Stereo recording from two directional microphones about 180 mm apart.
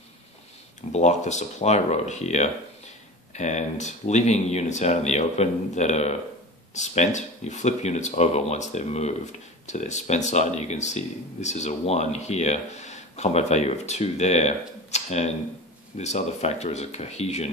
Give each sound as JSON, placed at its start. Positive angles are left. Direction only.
{"t": 0.9, "sound": "speech", "side_deg": 40}